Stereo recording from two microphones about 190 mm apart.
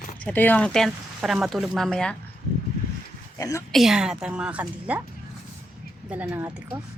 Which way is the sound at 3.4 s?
20° left (ahead or behind).